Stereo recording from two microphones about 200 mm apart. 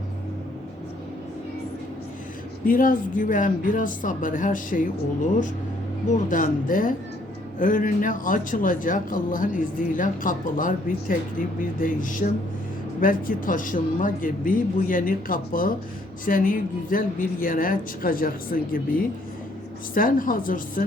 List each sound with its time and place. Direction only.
2.6 s a man's voice: 45° left (ahead or behind)